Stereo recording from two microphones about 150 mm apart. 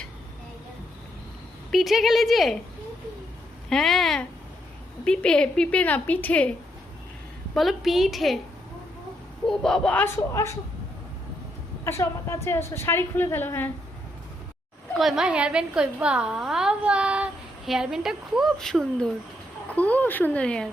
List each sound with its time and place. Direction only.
1.7 s a woman's voice: centre (ahead or behind)
3.7 s a woman's voice: centre (ahead or behind)
7.5 s a woman's voice: centre (ahead or behind)
9.5 s a woman's voice: 5° left (ahead or behind); by 10.6 s 20° left (ahead or behind)
11.9 s a woman's voice: 20° left (ahead or behind)
14.9 s a woman's voice: 5° right (ahead or behind)